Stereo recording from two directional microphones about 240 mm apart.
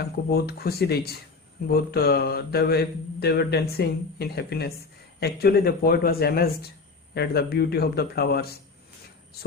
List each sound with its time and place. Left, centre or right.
0.3 s mantra: left